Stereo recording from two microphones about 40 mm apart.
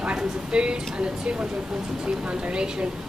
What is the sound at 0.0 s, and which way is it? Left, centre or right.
A woman's voice, right.